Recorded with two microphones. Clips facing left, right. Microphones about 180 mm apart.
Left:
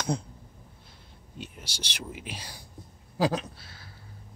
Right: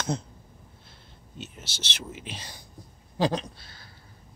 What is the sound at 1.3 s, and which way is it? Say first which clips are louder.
Speech: even; 10° left (ahead or behind).